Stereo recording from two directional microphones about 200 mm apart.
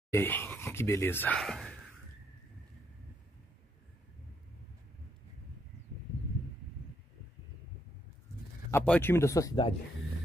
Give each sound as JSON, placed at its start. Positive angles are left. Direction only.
{"t": 0.1, "sound": "speech", "side_deg": 10}
{"t": 8.6, "sound": "speech", "side_deg": 10}